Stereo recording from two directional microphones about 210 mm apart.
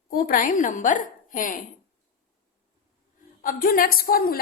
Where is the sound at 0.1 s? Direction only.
40° left (ahead or behind).